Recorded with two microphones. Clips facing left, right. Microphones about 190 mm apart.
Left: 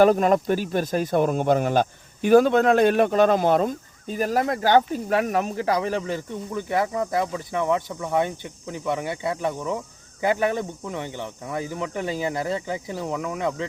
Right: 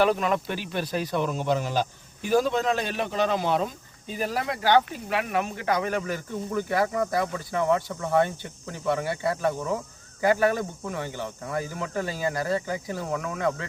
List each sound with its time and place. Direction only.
0.0 s speech: 45° left (ahead or behind); by 13.7 s 20° left (ahead or behind)